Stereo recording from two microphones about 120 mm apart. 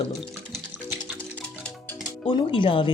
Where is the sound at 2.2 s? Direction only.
45° left (ahead or behind).